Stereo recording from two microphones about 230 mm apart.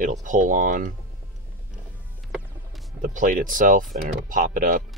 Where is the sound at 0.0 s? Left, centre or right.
Right.